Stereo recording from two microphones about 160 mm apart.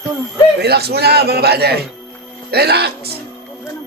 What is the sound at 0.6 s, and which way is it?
A man's voice, 85° right.